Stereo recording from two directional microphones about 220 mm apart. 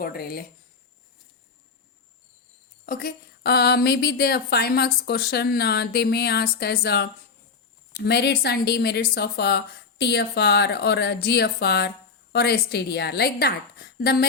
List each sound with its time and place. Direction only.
0.0 s a woman's voice: 45° left (ahead or behind)
2.8 s a woman's voice: 40° left (ahead or behind)